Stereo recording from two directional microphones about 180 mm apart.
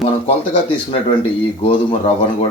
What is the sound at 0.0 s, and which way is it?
Speech, 35° left (ahead or behind).